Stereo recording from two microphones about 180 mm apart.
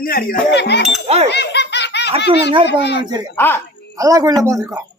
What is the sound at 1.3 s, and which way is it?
Laughter, 70° left (ahead or behind).